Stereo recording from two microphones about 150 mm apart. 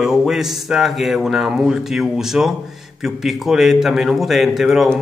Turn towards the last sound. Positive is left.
turn(degrees=0)  # may be behind; listen again after turning